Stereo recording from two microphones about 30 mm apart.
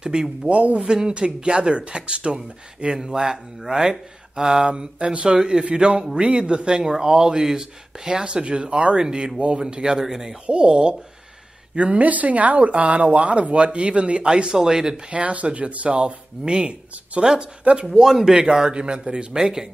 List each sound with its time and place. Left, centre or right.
0.0 s speech: right
0.5 s speech: right
1.0 s speech: right
4.6 s speech: right
5.3 s speech: right
9.6 s speech: right
10.0 s speech: centre
10.4 s speech: right
11.7 s speech: right
14.6 s speech: centre
15.0 s speech: right
15.9 s speech: right
18.7 s speech: right